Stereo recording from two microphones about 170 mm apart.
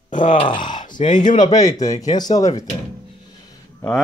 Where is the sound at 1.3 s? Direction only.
25° left (ahead or behind).